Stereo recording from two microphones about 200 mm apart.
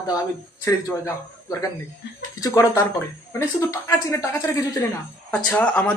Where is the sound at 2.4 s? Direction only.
15° left (ahead or behind).